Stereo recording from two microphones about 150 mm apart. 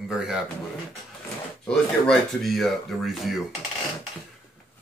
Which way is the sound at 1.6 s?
5° left (ahead or behind).